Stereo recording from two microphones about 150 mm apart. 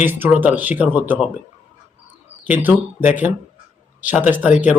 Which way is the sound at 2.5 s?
10° right (ahead or behind).